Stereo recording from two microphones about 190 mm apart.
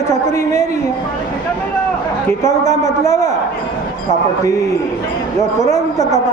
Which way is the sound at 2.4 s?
15° left (ahead or behind).